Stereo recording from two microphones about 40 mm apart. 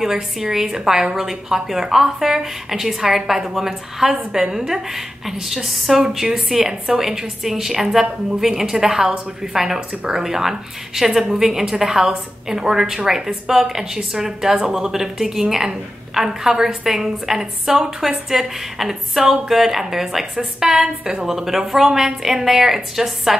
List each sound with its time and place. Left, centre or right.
0.0 s a woman's voice: centre
6.6 s a woman's voice: centre